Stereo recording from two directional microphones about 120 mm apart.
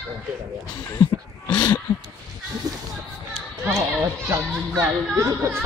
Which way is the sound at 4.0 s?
20° right (ahead or behind).